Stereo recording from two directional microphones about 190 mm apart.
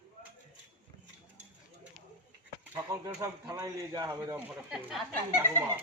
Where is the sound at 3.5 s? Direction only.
20° right (ahead or behind).